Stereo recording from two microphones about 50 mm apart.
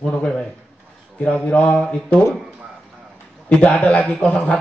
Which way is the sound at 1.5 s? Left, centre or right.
Left.